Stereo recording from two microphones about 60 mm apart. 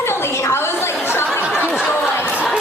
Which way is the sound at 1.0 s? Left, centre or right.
Left.